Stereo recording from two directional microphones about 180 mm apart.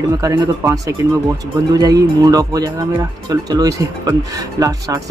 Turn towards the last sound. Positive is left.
turn(degrees=-20)  # may be behind; listen again after turning